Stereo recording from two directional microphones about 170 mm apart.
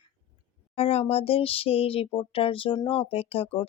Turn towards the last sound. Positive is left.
turn(degrees=30)  # may be behind; listen again after turning